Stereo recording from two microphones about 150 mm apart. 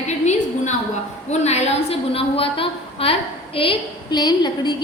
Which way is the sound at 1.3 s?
50° left (ahead or behind).